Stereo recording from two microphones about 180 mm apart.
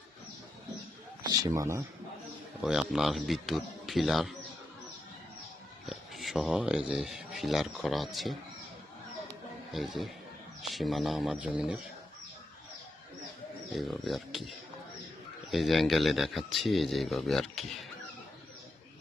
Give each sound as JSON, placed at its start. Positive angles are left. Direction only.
{"t": 1.3, "sound": "speech", "side_deg": -20}
{"t": 2.6, "sound": "speech", "side_deg": -5}
{"t": 5.8, "sound": "speech", "side_deg": 0}
{"t": 9.7, "sound": "speech", "side_deg": 0}
{"t": 13.7, "sound": "speech", "side_deg": 0}